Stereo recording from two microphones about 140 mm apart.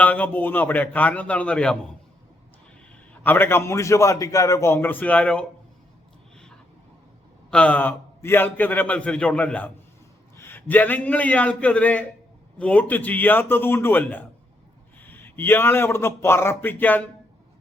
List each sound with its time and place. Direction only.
0.0 s a man's voice: 10° left (ahead or behind)
3.2 s a man's voice: 15° left (ahead or behind)
7.5 s a man's voice: 10° left (ahead or behind)